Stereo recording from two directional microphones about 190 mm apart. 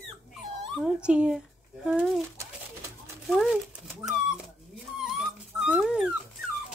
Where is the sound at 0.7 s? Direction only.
5° right (ahead or behind).